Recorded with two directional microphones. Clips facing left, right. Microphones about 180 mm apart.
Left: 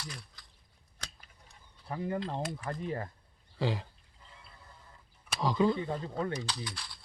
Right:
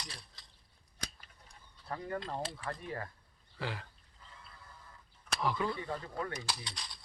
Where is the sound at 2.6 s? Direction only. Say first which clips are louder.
Left 4 dB; 20° left (ahead or behind).